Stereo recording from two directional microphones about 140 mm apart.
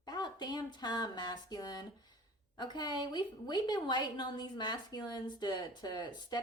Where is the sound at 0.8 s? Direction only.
30° left (ahead or behind).